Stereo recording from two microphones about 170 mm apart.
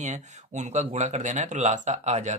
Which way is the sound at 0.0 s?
45° right (ahead or behind).